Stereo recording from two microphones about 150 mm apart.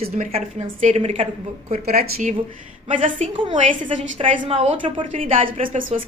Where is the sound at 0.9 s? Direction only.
40° right (ahead or behind).